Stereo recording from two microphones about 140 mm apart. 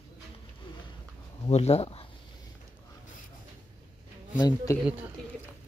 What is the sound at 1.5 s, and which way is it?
Speech, 50° left (ahead or behind).